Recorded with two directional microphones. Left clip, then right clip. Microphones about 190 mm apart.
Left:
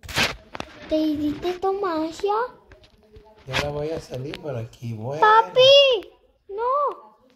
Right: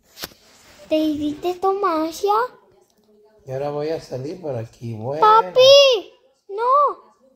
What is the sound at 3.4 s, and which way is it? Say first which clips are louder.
Speech: right 2 dB; 25° right (ahead or behind).